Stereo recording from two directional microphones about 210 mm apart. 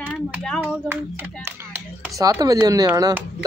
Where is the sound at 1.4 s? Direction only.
10° right (ahead or behind).